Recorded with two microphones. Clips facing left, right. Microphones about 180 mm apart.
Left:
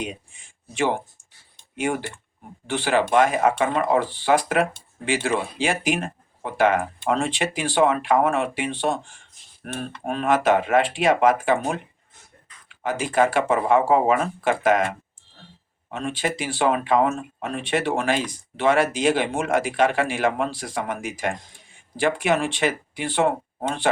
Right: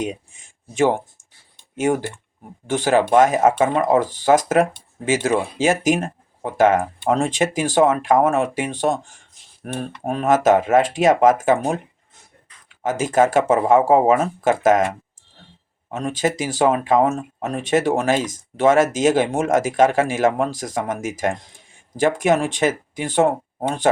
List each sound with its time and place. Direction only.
0.0 s speech: 45° right (ahead or behind)
15.9 s speech: 40° right (ahead or behind)